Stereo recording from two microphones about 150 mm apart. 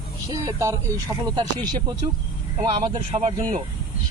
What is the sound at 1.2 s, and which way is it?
Speech, 30° right (ahead or behind).